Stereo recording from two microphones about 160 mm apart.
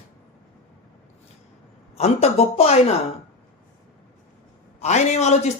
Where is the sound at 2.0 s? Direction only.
40° left (ahead or behind).